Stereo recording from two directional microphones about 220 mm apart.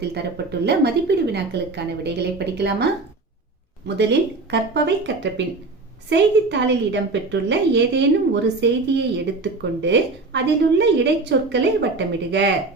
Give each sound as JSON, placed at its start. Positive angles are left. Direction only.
{"t": 0.1, "sound": "a woman's voice", "side_deg": -50}
{"t": 3.8, "sound": "a woman's voice", "side_deg": -50}